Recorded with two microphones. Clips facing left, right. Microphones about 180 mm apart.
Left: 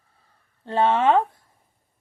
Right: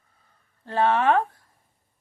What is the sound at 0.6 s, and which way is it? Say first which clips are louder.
Speech: left 2 dB; 25° left (ahead or behind).